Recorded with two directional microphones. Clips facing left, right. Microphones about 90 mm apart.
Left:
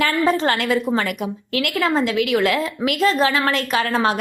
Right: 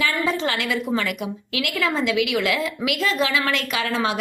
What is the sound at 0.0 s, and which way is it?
A woman's voice, 45° left (ahead or behind).